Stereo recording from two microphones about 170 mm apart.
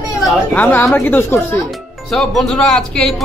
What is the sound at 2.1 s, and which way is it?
Speech, centre (ahead or behind).